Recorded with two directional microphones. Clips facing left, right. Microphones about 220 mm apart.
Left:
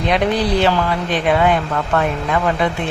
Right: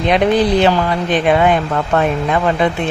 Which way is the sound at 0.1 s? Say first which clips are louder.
Right 5 dB; 20° right (ahead or behind).